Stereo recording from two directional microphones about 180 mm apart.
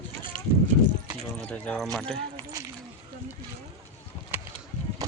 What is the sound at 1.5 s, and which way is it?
Speech, 5° left (ahead or behind).